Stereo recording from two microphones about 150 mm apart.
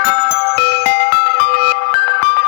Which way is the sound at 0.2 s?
90° left.